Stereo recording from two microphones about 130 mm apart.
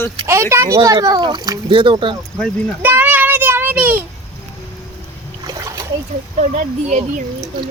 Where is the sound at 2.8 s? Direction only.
15° right (ahead or behind).